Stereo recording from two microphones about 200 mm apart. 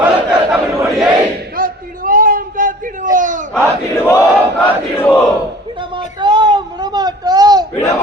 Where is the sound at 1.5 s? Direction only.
45° right (ahead or behind).